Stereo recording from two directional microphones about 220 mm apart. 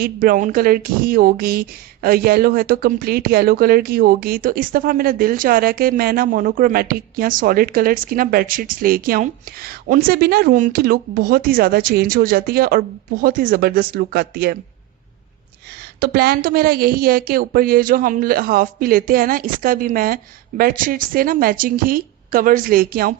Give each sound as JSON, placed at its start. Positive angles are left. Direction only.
{"t": 0.0, "sound": "speech", "side_deg": -40}
{"t": 16.0, "sound": "speech", "side_deg": -45}